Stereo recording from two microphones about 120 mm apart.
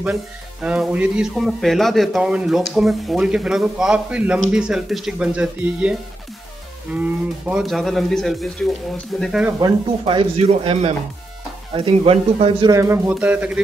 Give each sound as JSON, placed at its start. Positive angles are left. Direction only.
{"t": 0.0, "sound": "speech", "side_deg": -10}
{"t": 7.6, "sound": "speech", "side_deg": 0}
{"t": 9.5, "sound": "speech", "side_deg": -25}
{"t": 9.8, "sound": "speech", "side_deg": -45}
{"t": 12.7, "sound": "speech", "side_deg": -25}
{"t": 13.1, "sound": "speech", "side_deg": -10}